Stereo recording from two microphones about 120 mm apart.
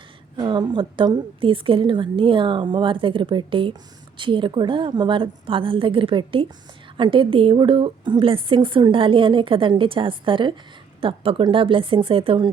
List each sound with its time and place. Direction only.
0.3 s a woman's voice: 40° right (ahead or behind)